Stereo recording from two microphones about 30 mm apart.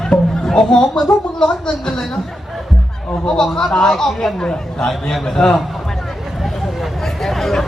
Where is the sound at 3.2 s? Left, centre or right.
Left.